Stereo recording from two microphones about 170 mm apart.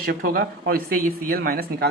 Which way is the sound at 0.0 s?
60° right (ahead or behind).